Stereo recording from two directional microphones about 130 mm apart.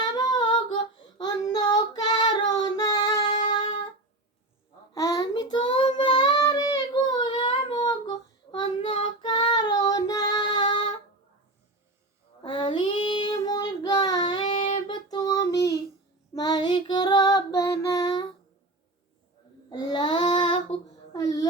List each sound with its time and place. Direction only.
0.3 s female singing: 35° left (ahead or behind)
1.2 s child singing: 30° left (ahead or behind)
4.9 s child singing: 25° left (ahead or behind)
12.4 s child singing: 40° left (ahead or behind)
16.3 s female singing: 30° left (ahead or behind)
19.7 s child singing: 35° left (ahead or behind)
21.1 s a sound: 30° left (ahead or behind)